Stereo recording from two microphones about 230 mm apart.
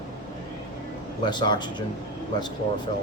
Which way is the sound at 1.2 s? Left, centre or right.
Centre.